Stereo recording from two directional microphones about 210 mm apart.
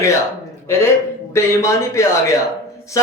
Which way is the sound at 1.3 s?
15° left (ahead or behind).